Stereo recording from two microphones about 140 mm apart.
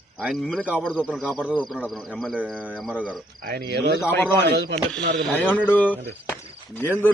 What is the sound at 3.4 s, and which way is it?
Speech, 90° right.